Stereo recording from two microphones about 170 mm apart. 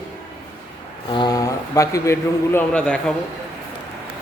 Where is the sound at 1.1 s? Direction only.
25° left (ahead or behind); by 3.1 s 5° left (ahead or behind).